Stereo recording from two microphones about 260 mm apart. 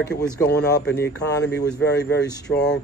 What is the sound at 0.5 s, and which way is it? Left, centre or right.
Speech, left.